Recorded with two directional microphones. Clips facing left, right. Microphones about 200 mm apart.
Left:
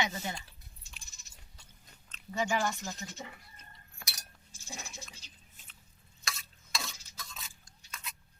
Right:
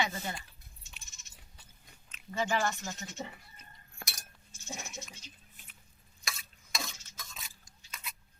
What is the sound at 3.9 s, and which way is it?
Chink, 50° right (ahead or behind).